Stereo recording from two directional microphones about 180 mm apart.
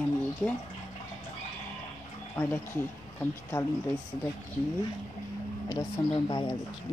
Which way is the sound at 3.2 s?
15° left (ahead or behind).